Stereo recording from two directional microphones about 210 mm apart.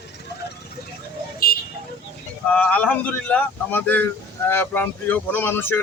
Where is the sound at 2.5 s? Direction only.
5° left (ahead or behind).